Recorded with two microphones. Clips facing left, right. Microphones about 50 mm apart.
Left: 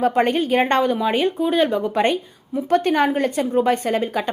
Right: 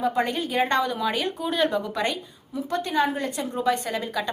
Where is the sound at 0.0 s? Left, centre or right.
Left.